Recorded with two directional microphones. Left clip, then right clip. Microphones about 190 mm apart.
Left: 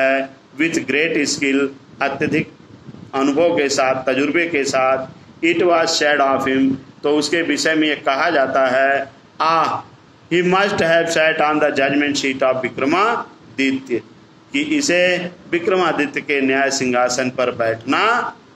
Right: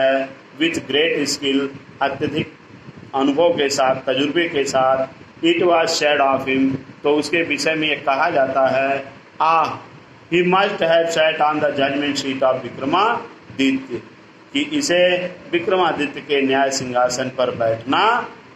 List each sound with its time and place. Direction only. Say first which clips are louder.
0.0 s a man's voice: even; 35° left (ahead or behind)
14.5 s a man's voice: left 1 dB; 35° left (ahead or behind)